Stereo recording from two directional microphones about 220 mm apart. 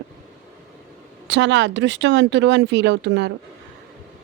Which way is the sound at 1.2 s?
55° right (ahead or behind).